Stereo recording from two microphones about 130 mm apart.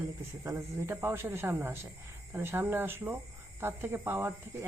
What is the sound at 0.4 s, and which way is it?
Speech, 20° right (ahead or behind).